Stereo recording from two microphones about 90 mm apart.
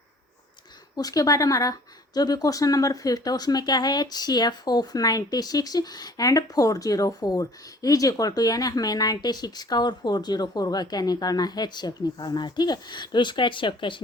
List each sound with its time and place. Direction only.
0.9 s speech: 40° left (ahead or behind); by 14.0 s 65° left (ahead or behind)